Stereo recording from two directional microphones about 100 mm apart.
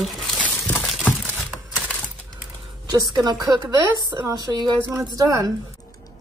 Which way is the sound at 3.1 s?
45° right (ahead or behind).